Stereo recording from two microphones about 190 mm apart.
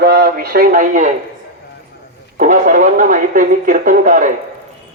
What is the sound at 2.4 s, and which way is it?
Speech, 45° right (ahead or behind).